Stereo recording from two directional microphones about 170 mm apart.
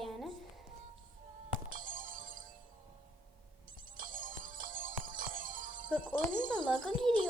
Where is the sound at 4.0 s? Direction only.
55° right (ahead or behind).